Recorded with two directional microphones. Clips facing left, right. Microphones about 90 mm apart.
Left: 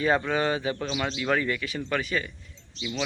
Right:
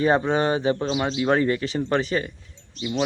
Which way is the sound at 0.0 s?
25° right (ahead or behind).